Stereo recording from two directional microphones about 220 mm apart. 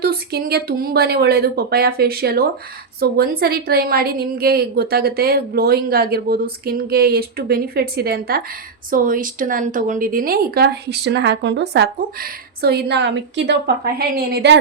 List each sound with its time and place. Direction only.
0.0 s a woman's voice: 45° right (ahead or behind)